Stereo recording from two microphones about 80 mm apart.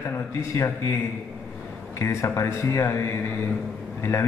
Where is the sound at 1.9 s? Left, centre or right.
Left.